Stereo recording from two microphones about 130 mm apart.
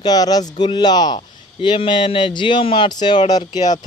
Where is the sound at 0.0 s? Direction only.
30° left (ahead or behind).